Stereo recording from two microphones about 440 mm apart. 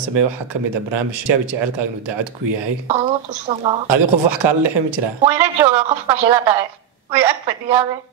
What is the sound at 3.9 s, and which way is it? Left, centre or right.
Speech, right.